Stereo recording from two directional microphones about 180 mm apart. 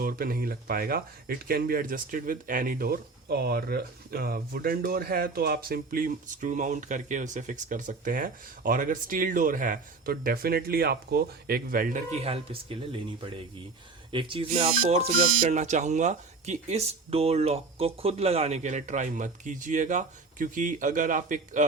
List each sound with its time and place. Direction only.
0.0 s speech: 55° right (ahead or behind); by 14.4 s 30° right (ahead or behind)
14.8 s speech: 45° right (ahead or behind)